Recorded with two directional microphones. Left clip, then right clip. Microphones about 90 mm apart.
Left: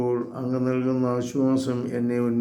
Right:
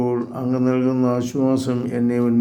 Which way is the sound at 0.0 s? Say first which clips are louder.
Right 3 dB; 35° right (ahead or behind).